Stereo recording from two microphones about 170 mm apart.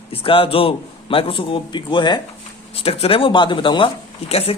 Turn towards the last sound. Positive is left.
turn(degrees=35)  # may be behind; listen again after turning